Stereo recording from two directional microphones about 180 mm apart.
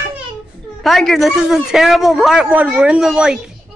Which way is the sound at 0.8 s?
Centre (ahead or behind).